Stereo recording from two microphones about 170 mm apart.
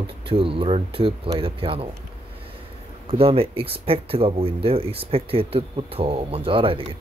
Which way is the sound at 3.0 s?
35° right (ahead or behind).